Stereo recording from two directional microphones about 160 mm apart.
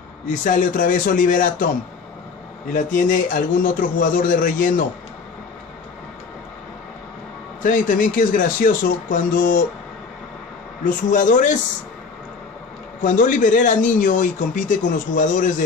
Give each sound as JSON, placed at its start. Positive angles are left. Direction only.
{"t": 0.3, "sound": "a man's voice", "side_deg": 55}
{"t": 2.7, "sound": "a man's voice", "side_deg": 55}
{"t": 7.6, "sound": "a man's voice", "side_deg": 55}
{"t": 10.8, "sound": "speech", "side_deg": 55}
{"t": 13.0, "sound": "speech", "side_deg": 55}